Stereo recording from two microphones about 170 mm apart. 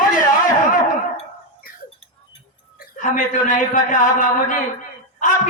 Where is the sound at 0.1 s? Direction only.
50° left (ahead or behind).